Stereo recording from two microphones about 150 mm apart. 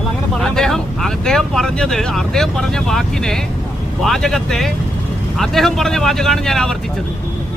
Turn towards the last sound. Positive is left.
turn(degrees=5)  # may be behind; listen again after turning